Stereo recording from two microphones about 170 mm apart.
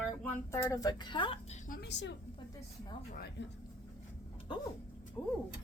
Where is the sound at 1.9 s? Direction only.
90° left.